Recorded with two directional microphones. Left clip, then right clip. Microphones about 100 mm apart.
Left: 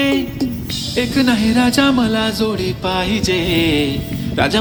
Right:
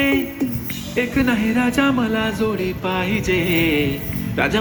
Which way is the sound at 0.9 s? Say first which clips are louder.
Left 3 dB; 60° left (ahead or behind).